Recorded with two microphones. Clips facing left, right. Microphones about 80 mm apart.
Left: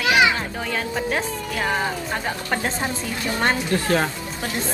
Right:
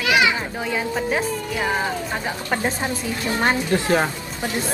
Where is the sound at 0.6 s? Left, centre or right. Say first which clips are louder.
Right 3 dB; centre.